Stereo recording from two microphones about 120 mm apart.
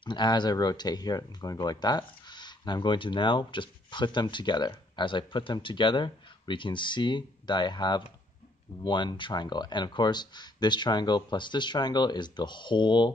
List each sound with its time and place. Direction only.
0.0 s speech: 40° left (ahead or behind)